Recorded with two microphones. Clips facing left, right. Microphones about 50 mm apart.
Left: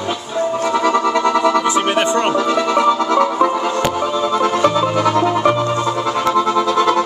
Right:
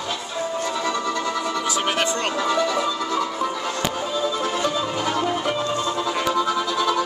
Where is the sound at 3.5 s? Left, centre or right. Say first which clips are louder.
Left 8 dB; left.